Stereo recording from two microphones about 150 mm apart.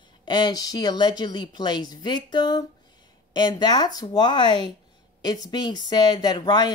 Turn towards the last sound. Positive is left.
turn(degrees=30)  # may be behind; listen again after turning